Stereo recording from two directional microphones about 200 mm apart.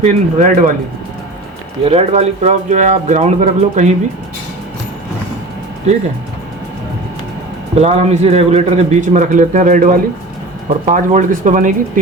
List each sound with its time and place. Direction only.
0.0 s a man's voice: 40° right (ahead or behind)
1.8 s a man's voice: 30° right (ahead or behind)
7.8 s a man's voice: 30° right (ahead or behind)